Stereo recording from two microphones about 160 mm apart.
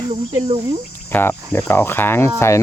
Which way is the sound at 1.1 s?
10° left (ahead or behind).